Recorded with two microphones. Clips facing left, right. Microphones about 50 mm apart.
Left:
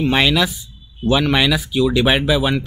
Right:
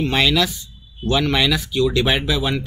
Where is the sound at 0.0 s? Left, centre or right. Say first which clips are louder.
Left 2 dB; centre.